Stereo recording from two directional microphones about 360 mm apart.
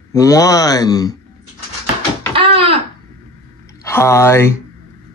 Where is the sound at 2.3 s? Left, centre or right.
Centre.